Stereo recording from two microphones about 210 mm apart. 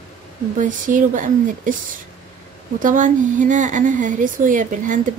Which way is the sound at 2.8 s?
40° right (ahead or behind).